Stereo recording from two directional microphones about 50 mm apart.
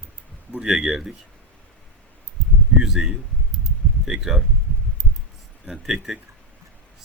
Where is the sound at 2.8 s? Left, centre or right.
Centre.